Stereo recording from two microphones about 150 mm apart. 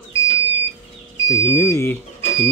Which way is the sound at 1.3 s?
20° left (ahead or behind).